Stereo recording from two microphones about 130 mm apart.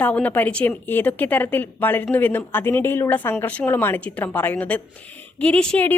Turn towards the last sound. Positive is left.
turn(degrees=10)  # may be behind; listen again after turning